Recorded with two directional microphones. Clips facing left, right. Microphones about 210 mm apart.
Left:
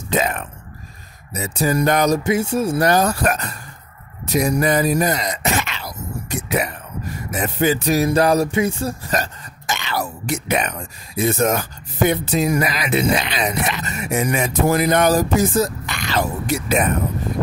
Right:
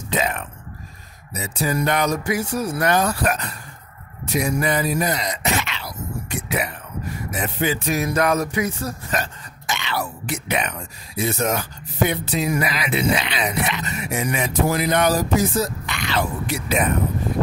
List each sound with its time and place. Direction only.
0.1 s speech: 45° left (ahead or behind)
1.3 s music: 45° left (ahead or behind)
2.2 s speech: 25° left (ahead or behind); by 6.7 s 45° left (ahead or behind)
7.2 s music: 45° left (ahead or behind)